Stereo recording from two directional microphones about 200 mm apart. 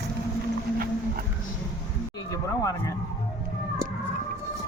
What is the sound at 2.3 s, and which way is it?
Speech, 15° left (ahead or behind).